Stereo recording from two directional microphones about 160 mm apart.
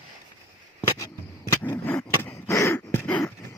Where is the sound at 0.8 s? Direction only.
20° left (ahead or behind).